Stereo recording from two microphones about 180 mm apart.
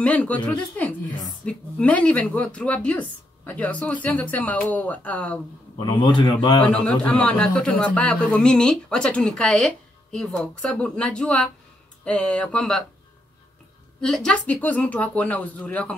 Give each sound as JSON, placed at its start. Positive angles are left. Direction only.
{"t": 0.0, "sound": "speech", "side_deg": 5}
{"t": 5.8, "sound": "speech", "side_deg": 25}
{"t": 6.7, "sound": "a man's voice", "side_deg": 5}
{"t": 14.0, "sound": "speech", "side_deg": 5}